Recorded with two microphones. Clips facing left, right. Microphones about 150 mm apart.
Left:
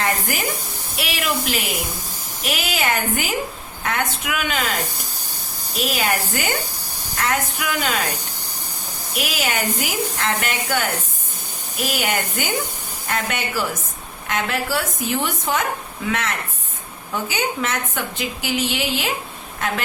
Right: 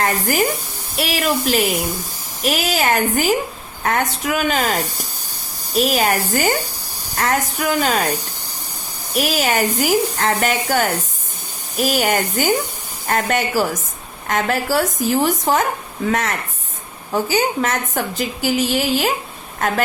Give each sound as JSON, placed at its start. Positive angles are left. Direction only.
{"t": 0.0, "sound": "a woman's voice", "side_deg": -40}
{"t": 5.7, "sound": "a woman's voice", "side_deg": -40}
{"t": 9.1, "sound": "a woman's voice", "side_deg": -40}